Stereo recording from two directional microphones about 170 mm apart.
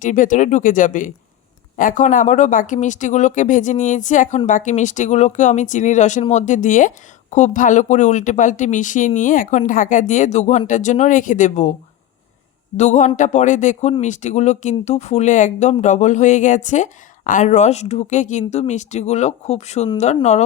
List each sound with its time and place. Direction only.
0.0 s speech: 50° left (ahead or behind)
12.7 s speech: 45° left (ahead or behind)